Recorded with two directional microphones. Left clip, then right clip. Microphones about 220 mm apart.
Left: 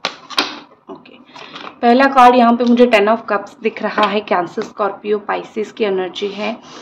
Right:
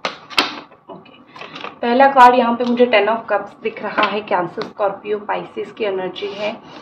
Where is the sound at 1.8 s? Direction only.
55° left (ahead or behind).